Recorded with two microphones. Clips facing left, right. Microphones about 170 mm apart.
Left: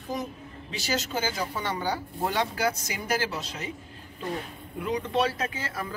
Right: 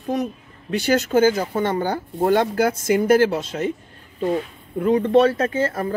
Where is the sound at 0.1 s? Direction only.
65° right (ahead or behind).